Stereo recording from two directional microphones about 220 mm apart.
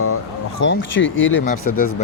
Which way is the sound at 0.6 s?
60° left (ahead or behind).